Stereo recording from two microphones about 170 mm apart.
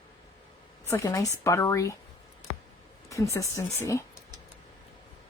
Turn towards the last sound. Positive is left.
turn(degrees=15)  # may be behind; listen again after turning